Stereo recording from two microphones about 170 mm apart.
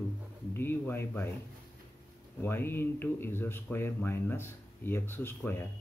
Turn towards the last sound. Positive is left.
turn(degrees=10)  # may be behind; listen again after turning